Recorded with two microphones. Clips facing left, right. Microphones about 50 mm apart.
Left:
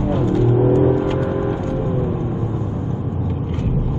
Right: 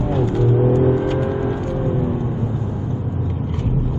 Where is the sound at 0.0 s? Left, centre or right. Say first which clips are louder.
Left 1 dB; left.